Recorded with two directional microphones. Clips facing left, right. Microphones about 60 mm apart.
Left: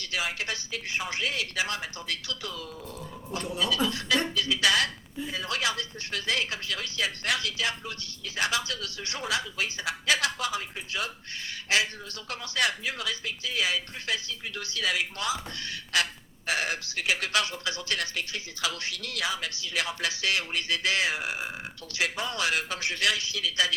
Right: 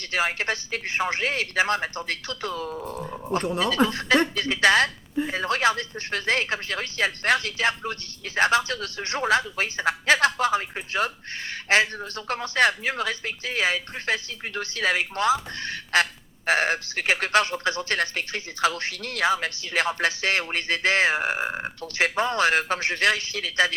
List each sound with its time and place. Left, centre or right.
0.0 s speech: right